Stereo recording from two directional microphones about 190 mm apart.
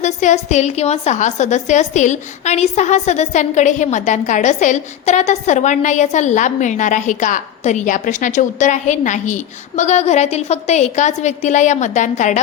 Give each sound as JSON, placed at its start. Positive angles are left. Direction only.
{"t": 0.0, "sound": "a woman's voice", "side_deg": 40}